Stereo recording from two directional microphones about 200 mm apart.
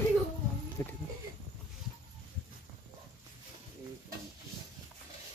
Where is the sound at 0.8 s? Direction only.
15° left (ahead or behind).